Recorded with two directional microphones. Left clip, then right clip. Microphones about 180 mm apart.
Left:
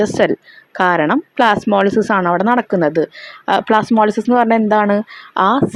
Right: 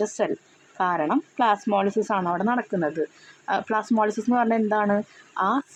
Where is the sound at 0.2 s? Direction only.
40° left (ahead or behind).